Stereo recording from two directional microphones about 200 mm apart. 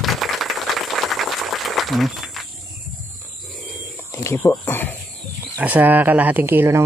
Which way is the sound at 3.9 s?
15° left (ahead or behind).